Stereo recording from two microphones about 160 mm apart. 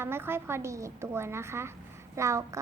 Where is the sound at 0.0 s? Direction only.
15° right (ahead or behind).